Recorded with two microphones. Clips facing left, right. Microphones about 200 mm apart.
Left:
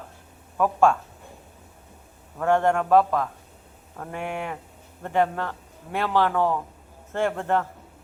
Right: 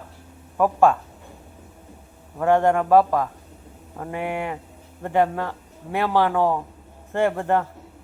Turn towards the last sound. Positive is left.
turn(degrees=-15)  # may be behind; listen again after turning